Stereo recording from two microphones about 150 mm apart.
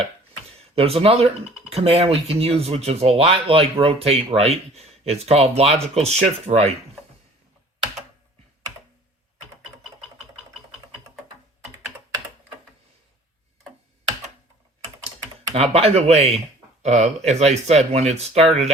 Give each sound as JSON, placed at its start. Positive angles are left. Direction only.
{"t": 0.5, "sound": "speech", "side_deg": -40}
{"t": 15.5, "sound": "speech", "side_deg": -45}